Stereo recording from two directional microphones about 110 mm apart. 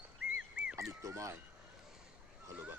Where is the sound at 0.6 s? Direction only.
10° right (ahead or behind).